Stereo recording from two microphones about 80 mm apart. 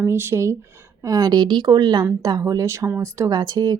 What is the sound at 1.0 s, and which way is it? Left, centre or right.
A woman's voice, right.